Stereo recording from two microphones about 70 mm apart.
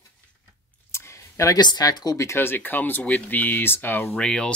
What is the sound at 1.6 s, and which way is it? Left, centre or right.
Speech, left.